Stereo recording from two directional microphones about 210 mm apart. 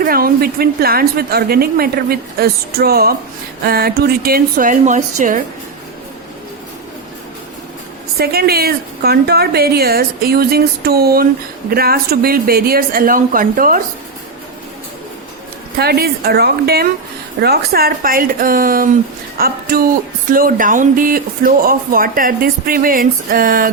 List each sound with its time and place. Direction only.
0.0 s speech: 45° right (ahead or behind)
8.2 s speech: 50° right (ahead or behind)
15.8 s speech: 50° right (ahead or behind)